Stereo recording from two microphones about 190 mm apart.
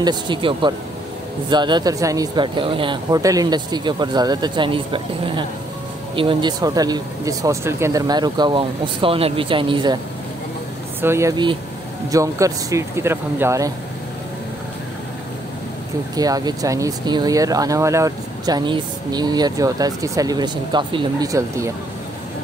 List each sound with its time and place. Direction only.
0.0 s speech: 25° right (ahead or behind)
11.0 s speech: 15° right (ahead or behind)
16.2 s speech: 20° right (ahead or behind)